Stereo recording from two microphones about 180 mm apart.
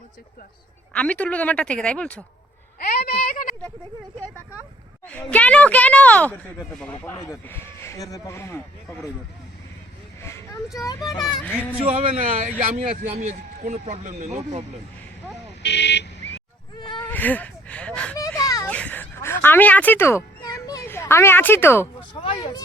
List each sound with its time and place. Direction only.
0.9 s speech: 5° left (ahead or behind)
2.7 s speech: 55° left (ahead or behind)
5.3 s speech: 5° left (ahead or behind)
10.2 s a sound: 15° left (ahead or behind)
11.3 s speech: 5° left (ahead or behind)
11.8 s a man's voice: 35° right (ahead or behind)
15.6 s a sound: 70° left (ahead or behind)
17.1 s speech: 10° left (ahead or behind)
18.2 s a sound: 20° left (ahead or behind)
18.7 s a sound: 10° left (ahead or behind)
20.7 s a child's voice: 15° left (ahead or behind)
22.1 s speech: 30° left (ahead or behind)